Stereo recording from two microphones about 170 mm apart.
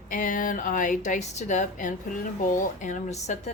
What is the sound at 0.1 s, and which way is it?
A woman's voice, 50° left (ahead or behind).